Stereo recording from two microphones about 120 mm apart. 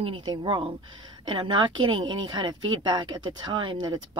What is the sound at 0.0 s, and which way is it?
A woman's voice, 40° right (ahead or behind).